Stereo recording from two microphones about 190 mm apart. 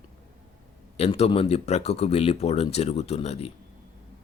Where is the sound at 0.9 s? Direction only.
35° left (ahead or behind).